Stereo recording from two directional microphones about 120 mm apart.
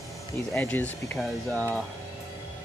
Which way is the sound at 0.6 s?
15° left (ahead or behind).